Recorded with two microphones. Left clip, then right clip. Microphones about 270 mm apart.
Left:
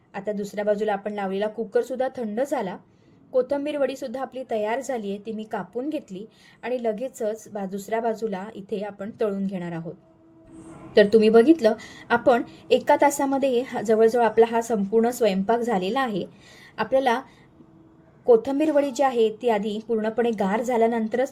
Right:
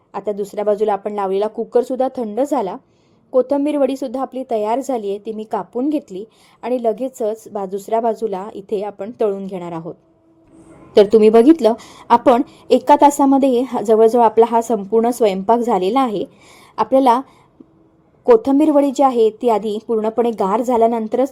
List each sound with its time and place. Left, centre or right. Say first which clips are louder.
0.1 s a woman's voice: right 7 dB; right
10.9 s a woman's voice: right 6 dB; right
18.4 s a woman's voice: right 8 dB; right